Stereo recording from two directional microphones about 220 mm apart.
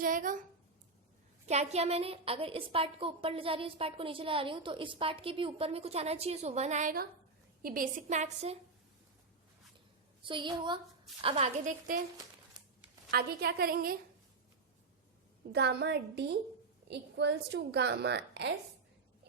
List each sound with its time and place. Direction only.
0.0 s a sound: 40° right (ahead or behind)
1.5 s a woman's voice: 30° right (ahead or behind)
10.2 s a woman's voice: 20° right (ahead or behind)
13.1 s a woman's voice: 45° right (ahead or behind)
15.5 s a woman's voice: 50° right (ahead or behind)